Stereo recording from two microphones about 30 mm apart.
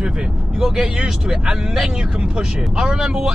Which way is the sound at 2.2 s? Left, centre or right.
Right.